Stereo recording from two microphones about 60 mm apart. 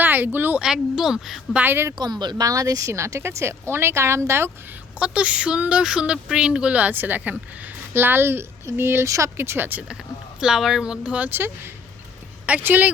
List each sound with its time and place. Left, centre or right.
0.0 s a sound: right
0.3 s speech: right
0.6 s speech: centre
2.4 s speech: right
2.9 s speech: right
4.9 s speech: centre; by 9.0 s right
9.0 s speech: right
9.4 s speech: right
10.4 s speech: centre
11.3 s speech: right
12.5 s speech: right